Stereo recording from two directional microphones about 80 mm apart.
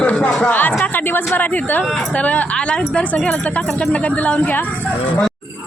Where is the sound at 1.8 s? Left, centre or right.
Centre.